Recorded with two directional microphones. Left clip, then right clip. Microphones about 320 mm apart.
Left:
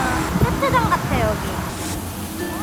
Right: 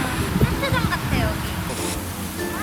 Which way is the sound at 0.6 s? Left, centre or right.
Centre.